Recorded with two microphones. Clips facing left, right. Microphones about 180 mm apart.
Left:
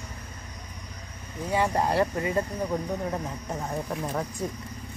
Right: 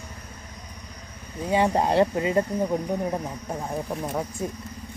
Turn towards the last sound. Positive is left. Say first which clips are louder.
# right 2 dB
turn(degrees=-10)  # may be behind; listen again after turning